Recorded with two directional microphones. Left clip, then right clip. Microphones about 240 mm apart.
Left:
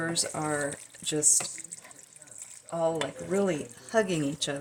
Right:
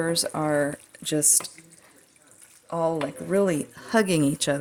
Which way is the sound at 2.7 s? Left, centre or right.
Right.